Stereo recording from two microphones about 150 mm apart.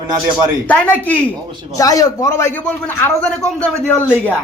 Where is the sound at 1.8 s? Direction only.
25° left (ahead or behind).